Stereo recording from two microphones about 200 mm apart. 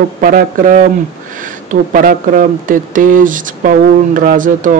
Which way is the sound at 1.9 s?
45° right (ahead or behind).